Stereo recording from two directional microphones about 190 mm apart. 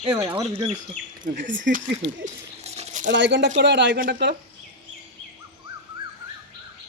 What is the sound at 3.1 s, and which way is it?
Speech, 70° right (ahead or behind).